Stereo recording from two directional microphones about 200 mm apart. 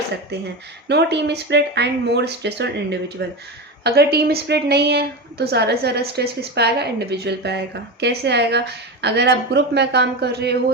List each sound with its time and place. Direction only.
0.9 s a woman's voice: 55° right (ahead or behind)